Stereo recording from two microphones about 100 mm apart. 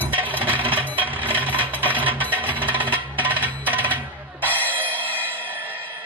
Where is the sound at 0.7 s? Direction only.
15° right (ahead or behind).